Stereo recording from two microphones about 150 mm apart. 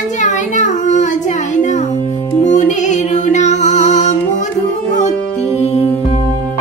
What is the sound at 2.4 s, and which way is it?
Music, 55° left (ahead or behind).